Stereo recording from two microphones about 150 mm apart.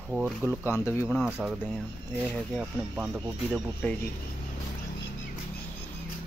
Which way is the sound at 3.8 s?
5° left (ahead or behind).